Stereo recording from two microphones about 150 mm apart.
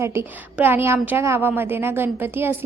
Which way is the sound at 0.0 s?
15° right (ahead or behind).